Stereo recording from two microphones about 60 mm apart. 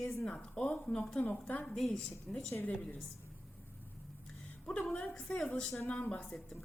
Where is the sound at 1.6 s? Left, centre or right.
Centre.